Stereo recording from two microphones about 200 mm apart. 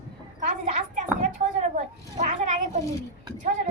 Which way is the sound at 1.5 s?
35° right (ahead or behind).